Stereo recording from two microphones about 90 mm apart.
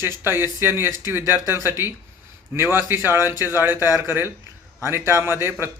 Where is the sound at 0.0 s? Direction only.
25° right (ahead or behind).